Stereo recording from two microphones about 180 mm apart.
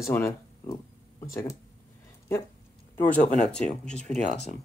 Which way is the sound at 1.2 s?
15° left (ahead or behind).